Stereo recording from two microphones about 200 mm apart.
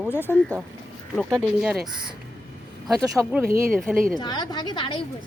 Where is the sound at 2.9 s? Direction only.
15° right (ahead or behind).